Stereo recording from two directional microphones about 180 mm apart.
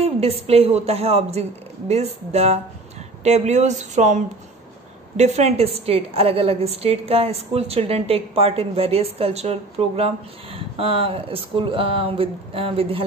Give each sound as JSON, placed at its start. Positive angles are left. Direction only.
{"t": 0.0, "sound": "a woman's voice", "side_deg": -35}